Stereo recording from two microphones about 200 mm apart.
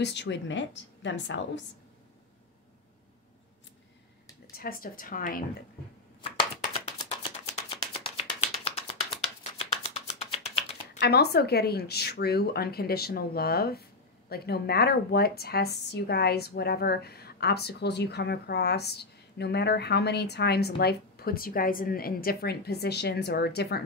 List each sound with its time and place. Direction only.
0.0 s speech: 60° left (ahead or behind)
4.5 s speech: 45° left (ahead or behind)
6.9 s a sound: 35° left (ahead or behind)
11.0 s speech: 55° left (ahead or behind)